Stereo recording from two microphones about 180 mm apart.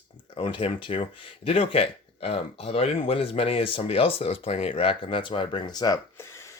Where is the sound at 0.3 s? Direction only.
30° left (ahead or behind).